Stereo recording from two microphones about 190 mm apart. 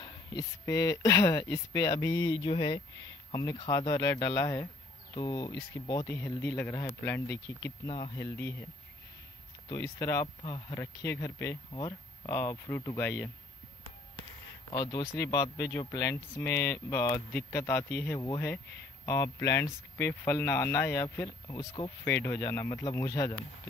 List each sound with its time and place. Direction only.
0.0 s speech: 20° left (ahead or behind)
9.7 s speech: 15° left (ahead or behind)
14.7 s speech: 20° left (ahead or behind)